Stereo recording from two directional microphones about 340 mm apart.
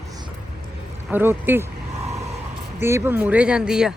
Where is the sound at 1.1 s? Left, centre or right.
Centre.